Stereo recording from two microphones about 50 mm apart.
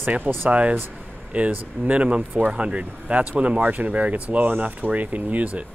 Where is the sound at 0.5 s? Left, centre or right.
Right.